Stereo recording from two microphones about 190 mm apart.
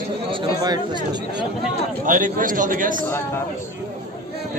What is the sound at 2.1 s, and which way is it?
Speech, 45° right (ahead or behind).